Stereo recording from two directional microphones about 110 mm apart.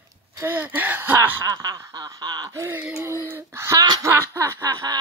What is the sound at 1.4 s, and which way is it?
Snicker, 35° right (ahead or behind).